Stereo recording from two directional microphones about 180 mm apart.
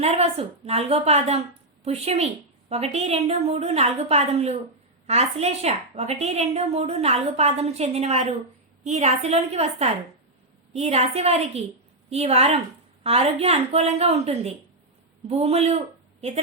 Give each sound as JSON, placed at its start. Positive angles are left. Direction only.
{"t": 0.0, "sound": "a woman's voice", "side_deg": -35}